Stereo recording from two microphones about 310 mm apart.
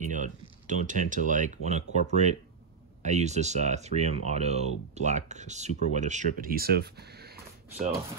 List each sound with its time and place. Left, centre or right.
0.0 s speech: right